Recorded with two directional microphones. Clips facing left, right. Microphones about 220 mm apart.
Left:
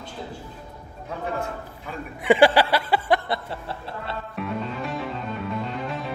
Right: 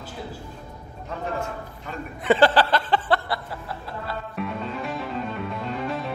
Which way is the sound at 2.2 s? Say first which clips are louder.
Left 2 dB; 10° left (ahead or behind).